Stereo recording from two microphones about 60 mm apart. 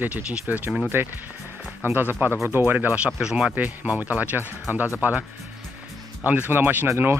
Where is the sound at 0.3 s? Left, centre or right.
Right.